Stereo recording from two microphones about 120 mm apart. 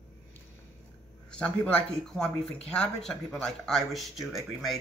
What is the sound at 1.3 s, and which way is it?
Speech, 5° left (ahead or behind).